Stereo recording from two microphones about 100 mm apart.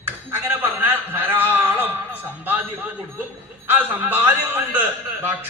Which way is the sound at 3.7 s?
15° right (ahead or behind).